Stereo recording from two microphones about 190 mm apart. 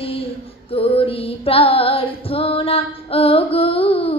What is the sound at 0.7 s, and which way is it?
Female singing, 30° left (ahead or behind).